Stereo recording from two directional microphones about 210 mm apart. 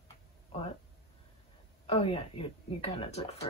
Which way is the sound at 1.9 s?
25° left (ahead or behind).